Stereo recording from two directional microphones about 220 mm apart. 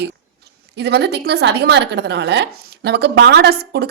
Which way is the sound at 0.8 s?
50° right (ahead or behind).